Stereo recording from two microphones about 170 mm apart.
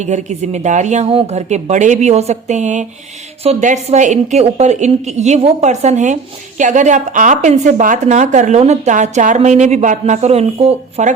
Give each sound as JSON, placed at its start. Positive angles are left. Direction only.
{"t": 0.0, "sound": "a woman's voice", "side_deg": -45}